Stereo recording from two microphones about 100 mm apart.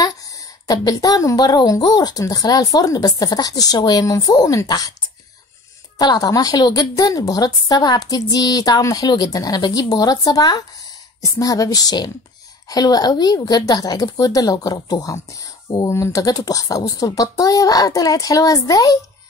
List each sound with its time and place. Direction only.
0.0 s a woman's voice: 35° left (ahead or behind)
5.9 s a woman's voice: 45° left (ahead or behind)